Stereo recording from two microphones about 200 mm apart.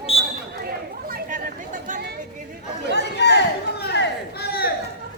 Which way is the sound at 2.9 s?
60° left (ahead or behind).